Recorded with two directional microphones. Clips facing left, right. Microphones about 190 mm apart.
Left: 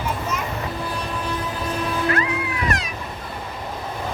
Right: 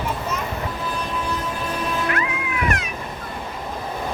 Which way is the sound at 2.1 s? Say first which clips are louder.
Left 1 dB; 30° left (ahead or behind).